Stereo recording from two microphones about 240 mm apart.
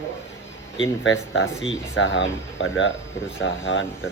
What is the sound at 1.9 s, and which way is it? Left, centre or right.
Speech, left.